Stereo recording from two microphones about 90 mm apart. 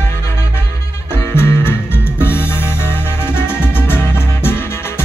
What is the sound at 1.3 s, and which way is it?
Music, 25° left (ahead or behind).